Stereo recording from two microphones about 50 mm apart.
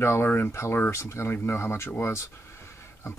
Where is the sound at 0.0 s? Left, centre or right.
Left.